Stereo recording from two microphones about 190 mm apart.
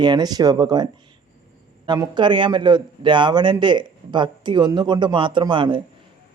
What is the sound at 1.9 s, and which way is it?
A man's voice, 25° right (ahead or behind).